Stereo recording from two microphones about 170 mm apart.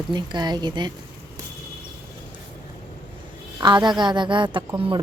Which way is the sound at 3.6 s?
25° right (ahead or behind).